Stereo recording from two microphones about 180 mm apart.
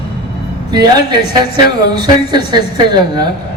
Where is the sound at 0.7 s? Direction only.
25° right (ahead or behind).